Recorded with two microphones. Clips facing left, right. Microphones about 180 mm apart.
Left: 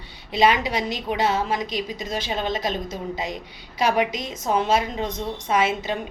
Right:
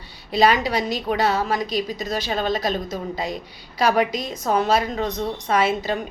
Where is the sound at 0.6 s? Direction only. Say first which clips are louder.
Right 3 dB; 20° left (ahead or behind).